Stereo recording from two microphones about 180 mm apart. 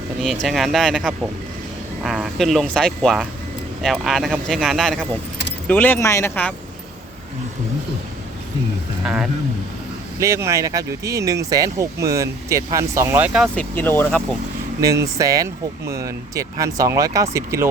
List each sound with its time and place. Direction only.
0.4 s speech: centre (ahead or behind)
10.2 s speech: 15° right (ahead or behind)
13.6 s speech: 10° left (ahead or behind)
14.8 s speech: 15° right (ahead or behind)